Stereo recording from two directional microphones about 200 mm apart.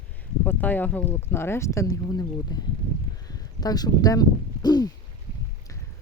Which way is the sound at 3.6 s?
20° left (ahead or behind).